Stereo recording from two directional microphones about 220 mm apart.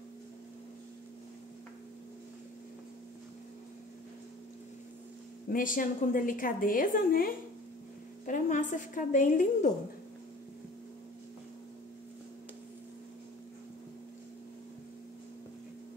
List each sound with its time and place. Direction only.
5.5 s a woman's voice: 40° left (ahead or behind)